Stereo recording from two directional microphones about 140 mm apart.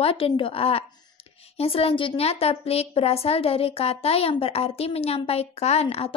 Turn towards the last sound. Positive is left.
turn(degrees=45)  # may be behind; listen again after turning